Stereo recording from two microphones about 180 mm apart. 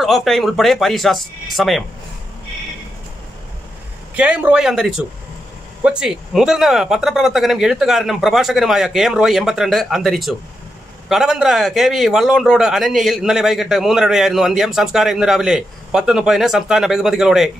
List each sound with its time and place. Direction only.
0.0 s a man's voice: centre (ahead or behind)
4.1 s a man's voice: 5° right (ahead or behind)